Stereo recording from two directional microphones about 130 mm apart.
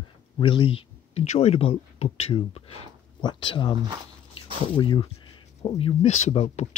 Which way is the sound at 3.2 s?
35° left (ahead or behind).